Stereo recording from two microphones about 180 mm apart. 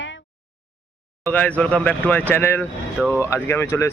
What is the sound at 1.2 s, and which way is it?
Speech, 10° left (ahead or behind).